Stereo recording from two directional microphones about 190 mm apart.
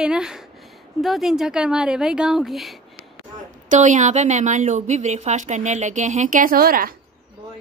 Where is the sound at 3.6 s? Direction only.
40° right (ahead or behind).